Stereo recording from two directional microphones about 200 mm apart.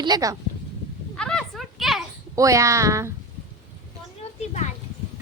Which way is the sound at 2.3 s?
15° right (ahead or behind).